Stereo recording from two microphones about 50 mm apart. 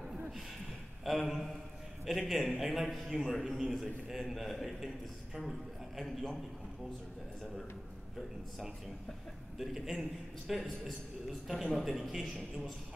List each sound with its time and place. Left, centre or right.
1.0 s a man's voice: centre
9.6 s a man's voice: centre